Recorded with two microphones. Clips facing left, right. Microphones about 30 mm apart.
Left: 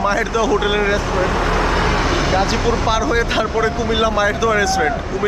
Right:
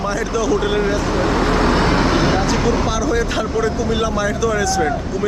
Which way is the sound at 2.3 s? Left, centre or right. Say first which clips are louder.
Even; left.